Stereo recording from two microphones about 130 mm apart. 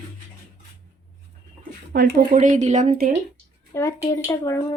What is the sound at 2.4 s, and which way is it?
Speech, 70° right (ahead or behind).